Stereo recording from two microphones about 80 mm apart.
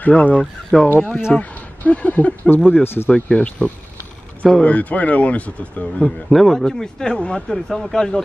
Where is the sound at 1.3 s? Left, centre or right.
Centre.